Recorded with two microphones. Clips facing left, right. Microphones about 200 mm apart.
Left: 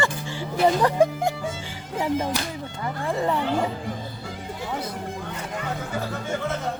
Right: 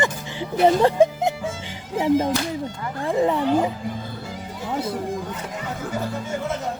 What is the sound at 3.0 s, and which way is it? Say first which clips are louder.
Speech: right 5 dB; 15° right (ahead or behind).